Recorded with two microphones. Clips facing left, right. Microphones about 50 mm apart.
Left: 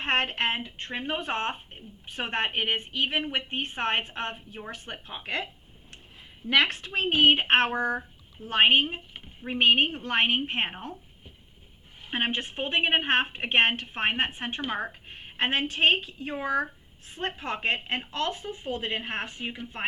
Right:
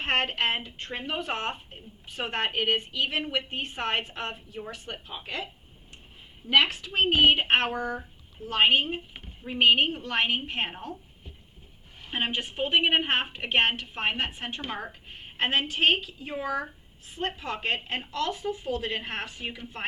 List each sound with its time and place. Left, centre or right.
0.0 s a woman's voice: left
6.5 s a woman's voice: left
12.1 s a woman's voice: left